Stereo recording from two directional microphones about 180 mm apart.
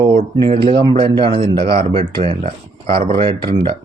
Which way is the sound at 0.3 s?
30° right (ahead or behind).